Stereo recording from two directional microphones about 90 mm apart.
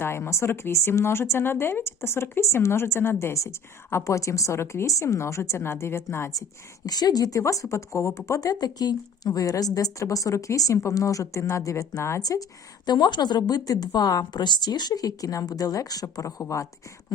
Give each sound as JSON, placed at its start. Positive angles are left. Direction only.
{"t": 0.0, "sound": "speech", "side_deg": 30}
{"t": 6.8, "sound": "a woman's voice", "side_deg": 50}
{"t": 12.3, "sound": "a woman's voice", "side_deg": 45}